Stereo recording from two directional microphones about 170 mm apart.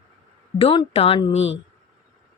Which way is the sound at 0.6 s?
35° left (ahead or behind).